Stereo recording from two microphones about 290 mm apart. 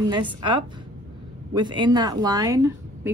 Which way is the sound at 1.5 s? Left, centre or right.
Centre.